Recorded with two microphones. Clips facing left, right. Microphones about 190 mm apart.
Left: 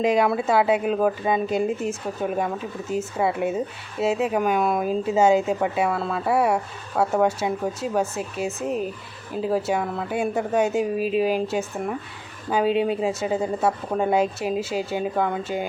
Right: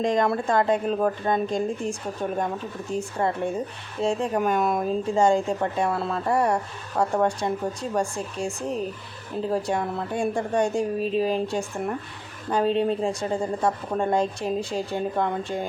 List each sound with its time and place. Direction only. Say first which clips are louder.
0.0 s speech: left 2 dB; 10° left (ahead or behind)